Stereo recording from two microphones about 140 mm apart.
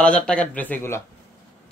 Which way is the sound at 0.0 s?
5° left (ahead or behind).